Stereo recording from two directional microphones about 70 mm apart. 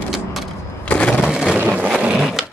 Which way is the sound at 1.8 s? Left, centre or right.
Centre.